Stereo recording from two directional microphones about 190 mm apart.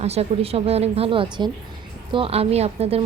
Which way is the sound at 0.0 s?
35° right (ahead or behind).